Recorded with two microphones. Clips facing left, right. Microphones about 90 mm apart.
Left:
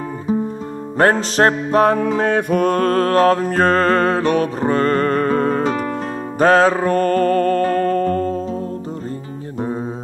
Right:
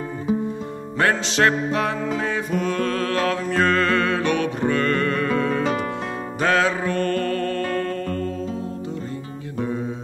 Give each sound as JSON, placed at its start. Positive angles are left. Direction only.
{"t": 0.9, "sound": "music", "side_deg": 40}
{"t": 2.0, "sound": "music", "side_deg": 55}